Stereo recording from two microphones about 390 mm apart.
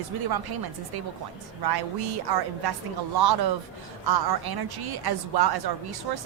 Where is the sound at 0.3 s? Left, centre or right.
Right.